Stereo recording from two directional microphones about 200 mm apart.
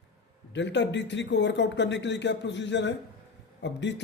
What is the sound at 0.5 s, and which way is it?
Speech, 60° left (ahead or behind).